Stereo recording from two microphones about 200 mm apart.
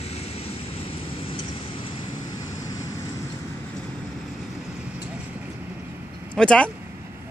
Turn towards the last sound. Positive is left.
turn(degrees=5)  # may be behind; listen again after turning